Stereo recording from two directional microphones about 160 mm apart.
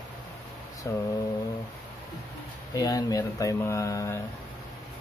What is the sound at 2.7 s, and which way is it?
Speech, 20° left (ahead or behind).